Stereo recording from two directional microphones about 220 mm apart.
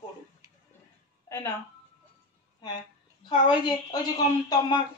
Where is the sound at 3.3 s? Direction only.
20° left (ahead or behind).